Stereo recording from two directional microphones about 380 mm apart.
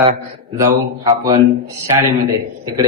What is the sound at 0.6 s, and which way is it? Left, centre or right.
Speech, centre.